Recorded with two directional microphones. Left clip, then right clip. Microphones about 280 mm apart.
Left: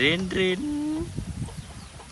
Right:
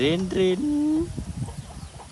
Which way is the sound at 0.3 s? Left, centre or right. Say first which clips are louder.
Right 2 dB; centre.